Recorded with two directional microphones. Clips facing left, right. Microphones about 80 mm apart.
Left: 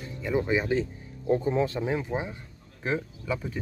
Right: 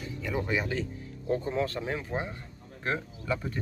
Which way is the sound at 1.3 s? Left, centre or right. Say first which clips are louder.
Left 4 dB; centre.